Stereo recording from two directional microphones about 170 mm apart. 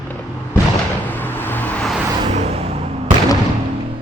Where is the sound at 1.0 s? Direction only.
10° left (ahead or behind).